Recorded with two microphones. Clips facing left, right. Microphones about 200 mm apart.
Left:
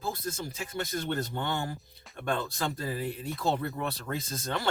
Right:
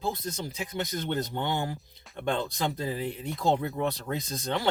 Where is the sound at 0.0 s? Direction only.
20° right (ahead or behind).